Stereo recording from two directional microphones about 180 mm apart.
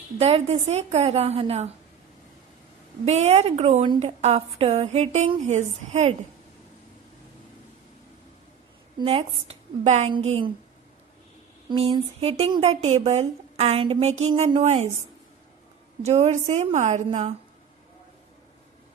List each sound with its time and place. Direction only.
0.2 s a woman's voice: 35° right (ahead or behind)
3.1 s a woman's voice: 35° right (ahead or behind)
9.0 s a woman's voice: 30° right (ahead or behind)
11.7 s a woman's voice: 30° right (ahead or behind)
16.0 s a woman's voice: 40° right (ahead or behind)